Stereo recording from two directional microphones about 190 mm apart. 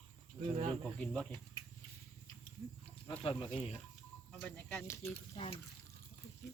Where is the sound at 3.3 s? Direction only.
30° left (ahead or behind).